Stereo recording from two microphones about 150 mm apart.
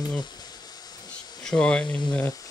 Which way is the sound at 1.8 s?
30° left (ahead or behind).